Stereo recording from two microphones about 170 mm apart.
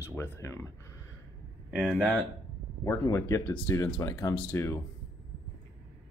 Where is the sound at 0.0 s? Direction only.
15° left (ahead or behind).